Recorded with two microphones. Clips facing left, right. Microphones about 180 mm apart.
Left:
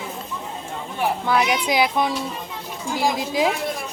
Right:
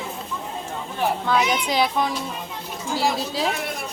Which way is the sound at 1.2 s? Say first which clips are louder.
Left 3 dB; 10° left (ahead or behind).